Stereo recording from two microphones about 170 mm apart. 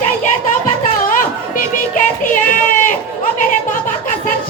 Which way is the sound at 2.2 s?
50° left (ahead or behind).